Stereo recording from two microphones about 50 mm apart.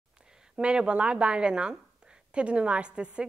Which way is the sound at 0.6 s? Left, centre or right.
Right.